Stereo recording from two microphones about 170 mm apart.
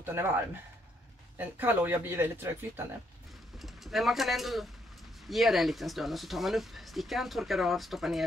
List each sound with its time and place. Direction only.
0.0 s speech: 15° right (ahead or behind)
1.4 s speech: 10° right (ahead or behind)
3.5 s speech: centre (ahead or behind)